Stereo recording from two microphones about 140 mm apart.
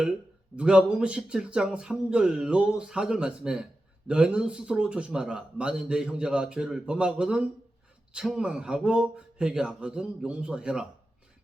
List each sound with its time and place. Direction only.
0.5 s speech: 5° right (ahead or behind)